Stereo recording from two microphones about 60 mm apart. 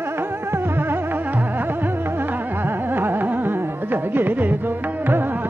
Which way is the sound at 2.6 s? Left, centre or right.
Right.